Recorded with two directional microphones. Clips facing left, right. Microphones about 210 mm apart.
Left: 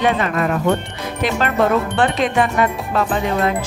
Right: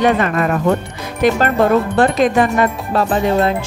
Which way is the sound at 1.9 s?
40° right (ahead or behind).